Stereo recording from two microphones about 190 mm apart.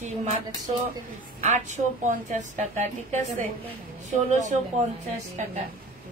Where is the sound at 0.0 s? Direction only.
35° right (ahead or behind).